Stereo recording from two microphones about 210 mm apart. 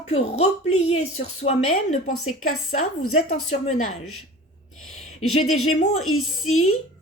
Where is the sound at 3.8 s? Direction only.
90° left.